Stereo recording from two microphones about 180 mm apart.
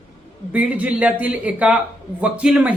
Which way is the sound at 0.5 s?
10° right (ahead or behind).